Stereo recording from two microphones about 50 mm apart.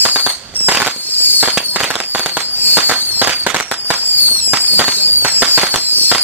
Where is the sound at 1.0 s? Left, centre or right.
Left.